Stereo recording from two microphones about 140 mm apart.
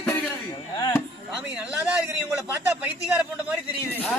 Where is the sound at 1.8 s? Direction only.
15° right (ahead or behind).